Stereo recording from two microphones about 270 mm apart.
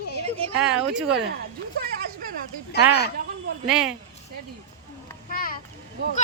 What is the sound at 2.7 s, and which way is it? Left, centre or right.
Speech, left.